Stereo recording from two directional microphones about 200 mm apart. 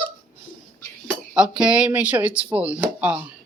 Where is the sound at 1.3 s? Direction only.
5° right (ahead or behind).